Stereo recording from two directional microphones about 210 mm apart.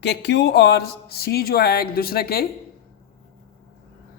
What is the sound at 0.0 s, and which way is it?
Speech, 55° left (ahead or behind).